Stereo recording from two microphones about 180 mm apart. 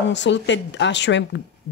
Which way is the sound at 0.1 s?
80° left.